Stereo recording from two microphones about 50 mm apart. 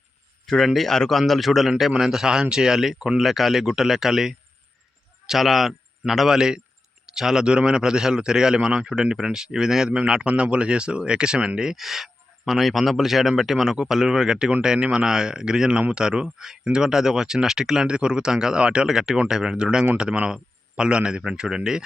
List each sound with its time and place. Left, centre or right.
0.4 s speech: centre
1.3 s a man's voice: centre
14.8 s speech: right
15.0 s speech: centre